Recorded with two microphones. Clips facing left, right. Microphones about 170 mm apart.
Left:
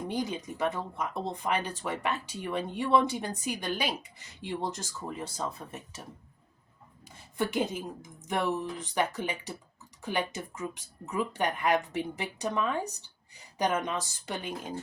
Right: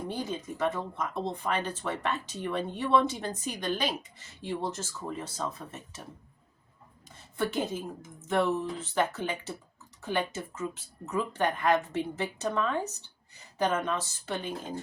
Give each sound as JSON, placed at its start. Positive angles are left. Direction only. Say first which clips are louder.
{"t": 0.1, "sound": "speech", "louder": "left 1 dB", "side_deg": 10}
{"t": 7.3, "sound": "speech", "louder": "left 1 dB", "side_deg": 15}